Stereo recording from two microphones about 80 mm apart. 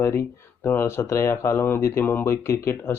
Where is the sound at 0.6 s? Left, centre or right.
Left.